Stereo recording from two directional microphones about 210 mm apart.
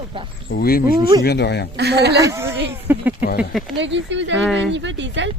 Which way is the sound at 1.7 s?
55° right (ahead or behind).